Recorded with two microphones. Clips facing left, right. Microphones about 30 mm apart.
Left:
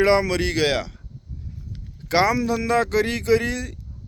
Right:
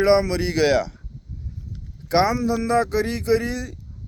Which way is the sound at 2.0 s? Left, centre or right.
Left.